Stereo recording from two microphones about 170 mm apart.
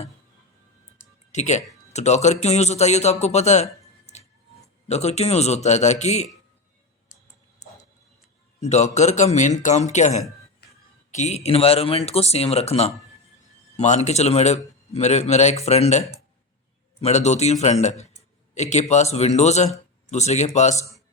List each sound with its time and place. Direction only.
1.3 s a man's voice: 45° left (ahead or behind)
8.6 s speech: 40° left (ahead or behind)
10.6 s music: 70° left (ahead or behind)
11.1 s a man's voice: 40° left (ahead or behind)